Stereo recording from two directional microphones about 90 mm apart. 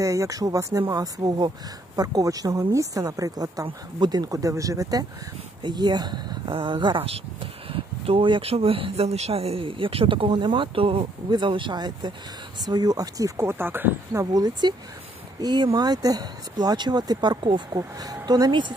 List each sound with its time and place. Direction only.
0.0 s a woman's voice: 35° right (ahead or behind)
5.6 s speech: 55° right (ahead or behind); by 7.2 s 75° right (ahead or behind)
7.7 s speech: 85° right
11.2 s speech: 60° right (ahead or behind); by 13.3 s 45° right (ahead or behind)
13.4 s speech: 25° right (ahead or behind)
14.1 s speech: 45° right (ahead or behind); by 17.6 s 60° right (ahead or behind)
18.2 s speech: 50° right (ahead or behind)